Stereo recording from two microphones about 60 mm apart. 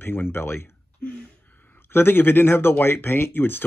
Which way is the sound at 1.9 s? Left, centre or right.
Left.